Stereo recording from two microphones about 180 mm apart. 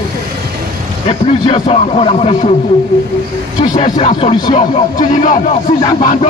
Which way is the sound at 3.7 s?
30° left (ahead or behind).